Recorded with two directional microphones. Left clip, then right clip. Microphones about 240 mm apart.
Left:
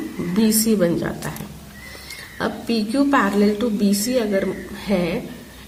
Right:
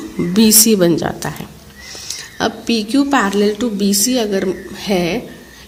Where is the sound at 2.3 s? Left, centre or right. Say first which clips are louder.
Right 5 dB; right.